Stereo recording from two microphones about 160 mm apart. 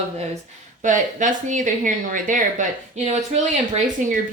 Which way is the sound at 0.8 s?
50° right (ahead or behind).